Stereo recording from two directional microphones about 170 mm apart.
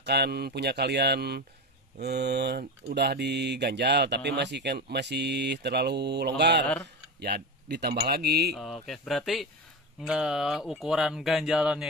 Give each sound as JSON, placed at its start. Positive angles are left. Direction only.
{"t": 0.0, "sound": "speech", "side_deg": -75}
{"t": 8.5, "sound": "speech", "side_deg": 0}